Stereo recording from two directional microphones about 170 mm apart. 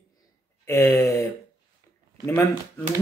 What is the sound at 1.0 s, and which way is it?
Speech, 20° left (ahead or behind).